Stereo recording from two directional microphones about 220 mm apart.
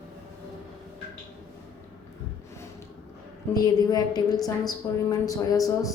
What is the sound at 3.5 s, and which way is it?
A woman's voice, 20° left (ahead or behind).